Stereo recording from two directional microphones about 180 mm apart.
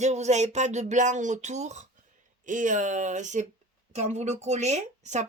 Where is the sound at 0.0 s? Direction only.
40° right (ahead or behind).